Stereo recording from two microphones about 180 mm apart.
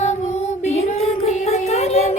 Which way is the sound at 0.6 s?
35° left (ahead or behind).